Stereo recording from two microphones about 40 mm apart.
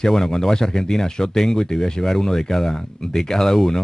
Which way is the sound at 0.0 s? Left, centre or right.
Centre.